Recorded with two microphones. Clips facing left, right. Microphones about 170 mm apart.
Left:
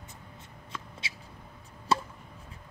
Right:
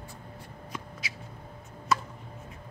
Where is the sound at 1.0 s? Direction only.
30° left (ahead or behind).